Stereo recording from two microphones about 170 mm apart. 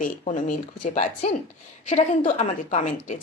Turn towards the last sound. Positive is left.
turn(degrees=45)  # may be behind; listen again after turning